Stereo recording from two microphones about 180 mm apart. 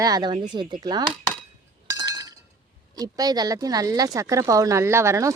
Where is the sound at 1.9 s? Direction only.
20° right (ahead or behind).